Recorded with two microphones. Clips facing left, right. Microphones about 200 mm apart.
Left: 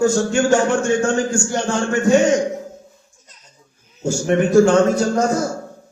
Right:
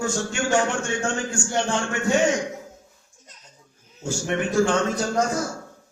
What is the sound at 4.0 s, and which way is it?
Speech, 40° left (ahead or behind).